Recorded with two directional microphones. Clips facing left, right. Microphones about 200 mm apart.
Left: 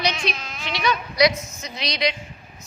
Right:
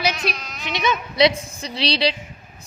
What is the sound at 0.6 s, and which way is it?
A woman's voice, 20° right (ahead or behind).